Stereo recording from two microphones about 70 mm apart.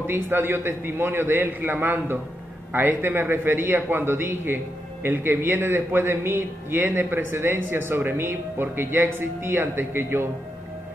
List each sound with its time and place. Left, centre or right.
0.0 s a man's voice: right